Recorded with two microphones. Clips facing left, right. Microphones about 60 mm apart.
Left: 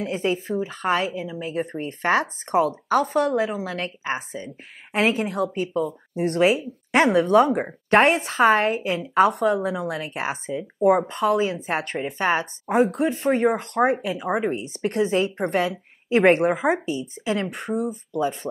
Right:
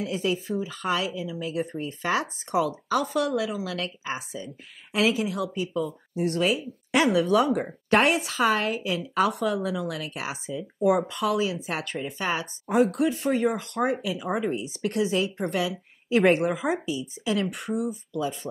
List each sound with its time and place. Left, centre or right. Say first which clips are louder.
0.0 s a woman's voice: left 3 dB; left